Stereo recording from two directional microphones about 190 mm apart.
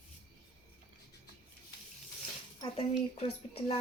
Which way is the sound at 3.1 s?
30° left (ahead or behind).